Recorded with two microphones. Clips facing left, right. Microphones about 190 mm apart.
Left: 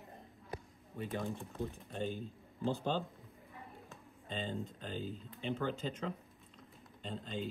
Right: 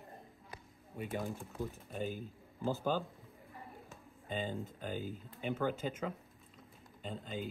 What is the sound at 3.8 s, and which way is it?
Speech, 5° right (ahead or behind).